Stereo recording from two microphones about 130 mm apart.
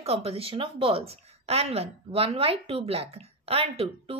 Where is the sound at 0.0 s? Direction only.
50° right (ahead or behind).